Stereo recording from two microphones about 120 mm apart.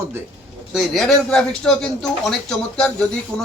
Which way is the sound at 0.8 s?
5° left (ahead or behind).